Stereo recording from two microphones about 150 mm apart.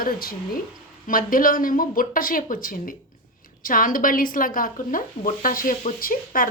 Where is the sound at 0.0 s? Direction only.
75° left (ahead or behind).